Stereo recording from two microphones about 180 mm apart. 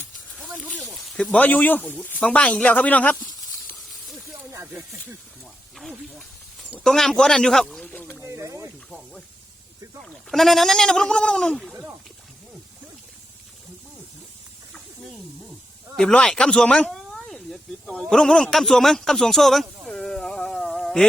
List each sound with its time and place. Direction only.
0.4 s a sound: 5° right (ahead or behind)
0.7 s speech: 5° left (ahead or behind)
4.5 s snake: 10° right (ahead or behind)
5.7 s speech: centre (ahead or behind)
8.2 s speech: 15° right (ahead or behind)
10.1 s speech: centre (ahead or behind)
16.0 s speech: 5° left (ahead or behind)
18.1 s a sound: 5° left (ahead or behind)